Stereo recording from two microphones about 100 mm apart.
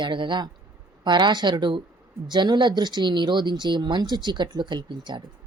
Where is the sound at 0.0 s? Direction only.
50° right (ahead or behind).